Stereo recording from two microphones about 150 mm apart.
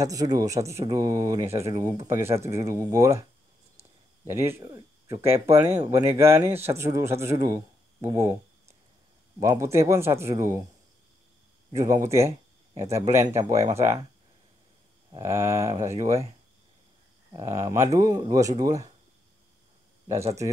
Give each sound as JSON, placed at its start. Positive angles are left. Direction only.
{"t": 0.0, "sound": "speech", "side_deg": -25}
{"t": 11.7, "sound": "speech", "side_deg": -20}
{"t": 15.1, "sound": "speech", "side_deg": -20}
{"t": 17.3, "sound": "speech", "side_deg": -20}